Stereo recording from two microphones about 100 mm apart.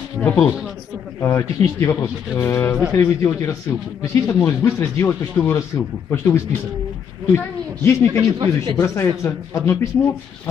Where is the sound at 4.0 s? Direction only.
30° left (ahead or behind).